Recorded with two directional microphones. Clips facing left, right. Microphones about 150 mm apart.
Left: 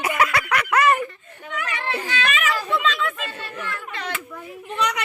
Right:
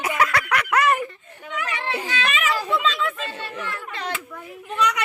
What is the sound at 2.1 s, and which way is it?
Children playing, 30° right (ahead or behind).